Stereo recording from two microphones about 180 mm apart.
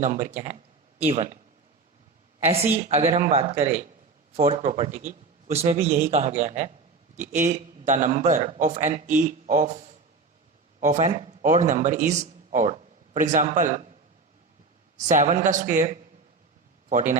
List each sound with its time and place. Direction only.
0.0 s a man's voice: 40° right (ahead or behind)
2.9 s a man's voice: 30° right (ahead or behind)
14.9 s a man's voice: 40° right (ahead or behind)